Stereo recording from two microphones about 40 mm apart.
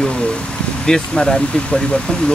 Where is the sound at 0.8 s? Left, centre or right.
Centre.